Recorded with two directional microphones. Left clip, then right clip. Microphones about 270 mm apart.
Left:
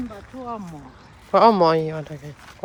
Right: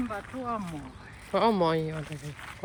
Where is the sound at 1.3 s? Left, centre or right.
Centre.